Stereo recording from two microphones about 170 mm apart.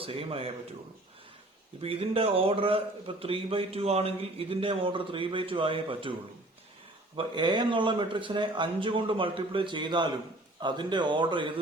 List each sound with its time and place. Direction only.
0.0 s a man's voice: 35° right (ahead or behind)
1.8 s a man's voice: 35° right (ahead or behind)
7.2 s a man's voice: 25° right (ahead or behind)